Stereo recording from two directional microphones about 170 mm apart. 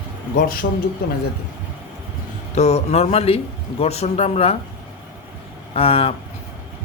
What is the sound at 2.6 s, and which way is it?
A man's voice, 40° left (ahead or behind).